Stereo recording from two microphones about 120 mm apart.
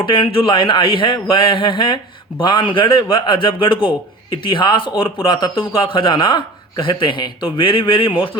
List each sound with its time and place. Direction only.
0.0 s speech: 45° left (ahead or behind)